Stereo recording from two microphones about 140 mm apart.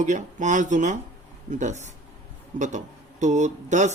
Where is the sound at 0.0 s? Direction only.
60° right (ahead or behind).